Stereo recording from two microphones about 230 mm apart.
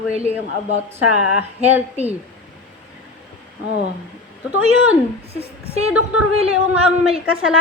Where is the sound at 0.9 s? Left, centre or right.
Centre.